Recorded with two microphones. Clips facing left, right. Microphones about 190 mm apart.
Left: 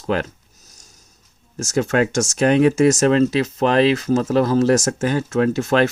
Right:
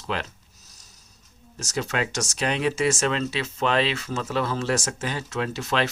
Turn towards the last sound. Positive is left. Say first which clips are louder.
# left 9 dB
turn(degrees=50)  # may be behind; listen again after turning